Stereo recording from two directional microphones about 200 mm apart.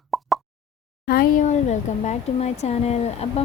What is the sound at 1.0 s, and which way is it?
Speech, 45° left (ahead or behind).